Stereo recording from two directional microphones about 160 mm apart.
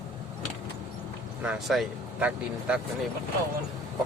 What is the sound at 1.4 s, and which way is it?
Speech, 5° right (ahead or behind).